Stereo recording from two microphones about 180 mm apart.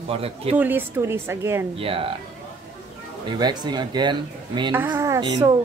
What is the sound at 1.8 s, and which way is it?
Speech, 30° right (ahead or behind).